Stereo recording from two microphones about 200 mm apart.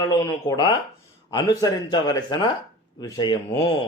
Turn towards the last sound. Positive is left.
turn(degrees=20)  # may be behind; listen again after turning